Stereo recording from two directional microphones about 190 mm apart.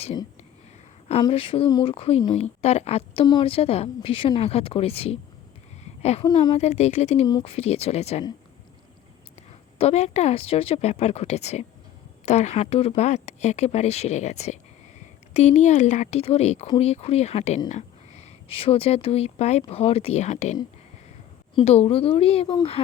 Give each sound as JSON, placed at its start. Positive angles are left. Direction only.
{"t": 1.2, "sound": "speech", "side_deg": 30}
{"t": 5.8, "sound": "a sound", "side_deg": 35}
{"t": 6.4, "sound": "speech", "side_deg": 30}
{"t": 9.7, "sound": "speech", "side_deg": 35}